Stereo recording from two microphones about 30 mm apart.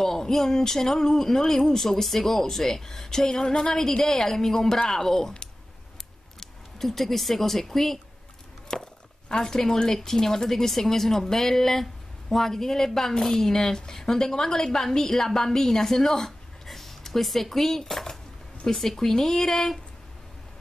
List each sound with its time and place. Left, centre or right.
0.0 s speech: centre
6.4 s speech: centre
8.7 s a woman's voice: left